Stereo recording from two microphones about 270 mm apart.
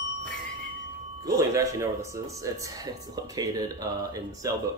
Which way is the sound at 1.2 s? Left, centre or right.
Centre.